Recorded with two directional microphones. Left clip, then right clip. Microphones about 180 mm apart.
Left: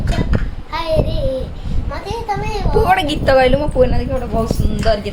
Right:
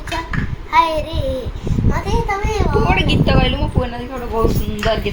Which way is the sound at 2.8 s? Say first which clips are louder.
Left 3 dB; 35° left (ahead or behind).